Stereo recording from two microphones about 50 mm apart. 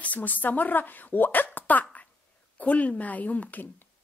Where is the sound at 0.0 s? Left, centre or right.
Left.